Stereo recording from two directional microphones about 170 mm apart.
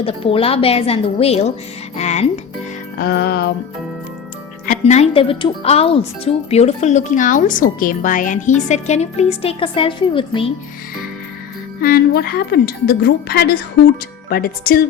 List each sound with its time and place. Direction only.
0.0 s a woman's voice: 35° left (ahead or behind)
3.0 s a woman's voice: 65° left (ahead or behind)
4.6 s a woman's voice: 45° left (ahead or behind); by 10.5 s 30° left (ahead or behind)
11.8 s a woman's voice: 65° left (ahead or behind)